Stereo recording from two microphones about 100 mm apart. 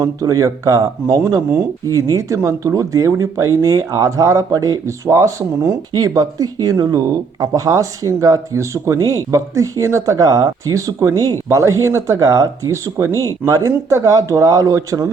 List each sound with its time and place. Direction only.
0.0 s speech: 35° right (ahead or behind)